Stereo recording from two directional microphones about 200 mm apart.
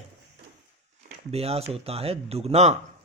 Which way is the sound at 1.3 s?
30° right (ahead or behind).